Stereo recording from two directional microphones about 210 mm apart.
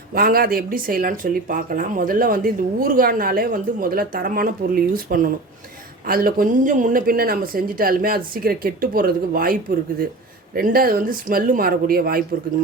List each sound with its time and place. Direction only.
0.1 s speech: 45° right (ahead or behind)